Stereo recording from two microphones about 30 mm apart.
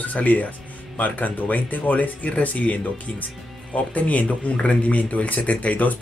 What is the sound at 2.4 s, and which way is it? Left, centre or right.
Speech, left.